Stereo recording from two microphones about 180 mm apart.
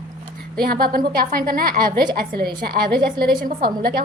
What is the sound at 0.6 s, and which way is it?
A woman's voice, 55° right (ahead or behind).